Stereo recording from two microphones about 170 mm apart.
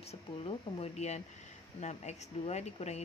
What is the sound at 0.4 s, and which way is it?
Speech, 35° left (ahead or behind).